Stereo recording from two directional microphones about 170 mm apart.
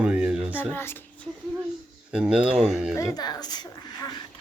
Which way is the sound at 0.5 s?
15° left (ahead or behind).